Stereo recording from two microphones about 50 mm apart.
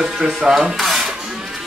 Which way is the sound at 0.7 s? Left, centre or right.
Centre.